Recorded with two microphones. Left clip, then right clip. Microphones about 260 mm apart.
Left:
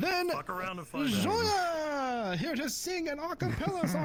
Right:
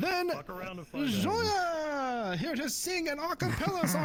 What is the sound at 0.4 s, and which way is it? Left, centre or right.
Speech, left.